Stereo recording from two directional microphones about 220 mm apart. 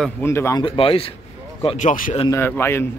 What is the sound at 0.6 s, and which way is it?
Speech, 25° left (ahead or behind).